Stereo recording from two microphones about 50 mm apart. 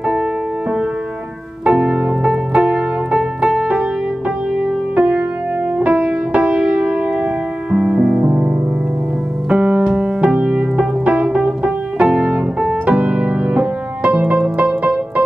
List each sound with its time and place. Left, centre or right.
1.6 s piano: centre
4.9 s music: right
9.5 s piano: centre
12.8 s music: right